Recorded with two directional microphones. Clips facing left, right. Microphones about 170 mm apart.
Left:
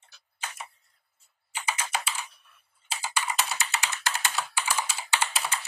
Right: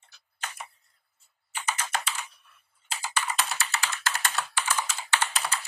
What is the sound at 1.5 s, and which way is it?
Computer keyboard, 10° left (ahead or behind).